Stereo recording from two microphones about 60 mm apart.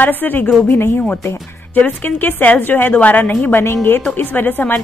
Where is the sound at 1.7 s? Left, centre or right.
Left.